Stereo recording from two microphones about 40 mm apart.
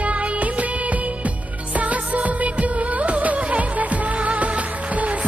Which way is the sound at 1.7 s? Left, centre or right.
Right.